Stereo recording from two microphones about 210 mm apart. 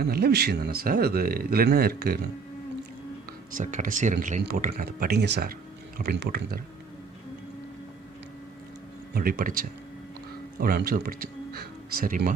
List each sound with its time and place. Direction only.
0.0 s speech: 50° right (ahead or behind)
3.5 s speech: 35° right (ahead or behind)
9.1 s speech: 45° right (ahead or behind)